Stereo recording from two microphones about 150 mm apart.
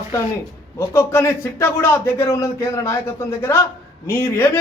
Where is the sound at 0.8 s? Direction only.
15° left (ahead or behind).